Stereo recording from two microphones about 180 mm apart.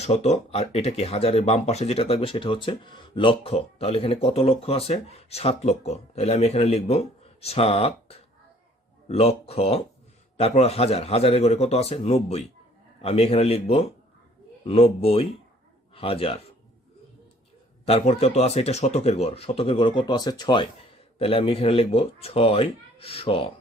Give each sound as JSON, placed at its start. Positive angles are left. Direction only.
{"t": 0.0, "sound": "speech", "side_deg": 35}
{"t": 17.8, "sound": "speech", "side_deg": 35}